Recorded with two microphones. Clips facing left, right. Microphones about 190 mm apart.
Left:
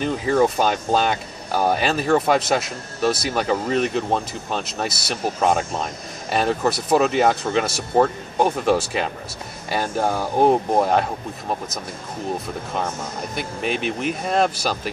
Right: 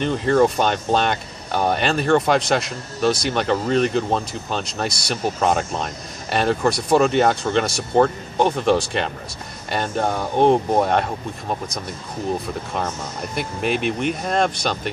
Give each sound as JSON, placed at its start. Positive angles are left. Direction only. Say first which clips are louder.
{"t": 0.0, "sound": "speech", "louder": "right 2 dB", "side_deg": 5}
{"t": 13.3, "sound": "speech", "louder": "right 3 dB", "side_deg": 0}